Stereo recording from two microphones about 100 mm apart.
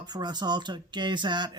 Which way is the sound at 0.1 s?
45° right (ahead or behind).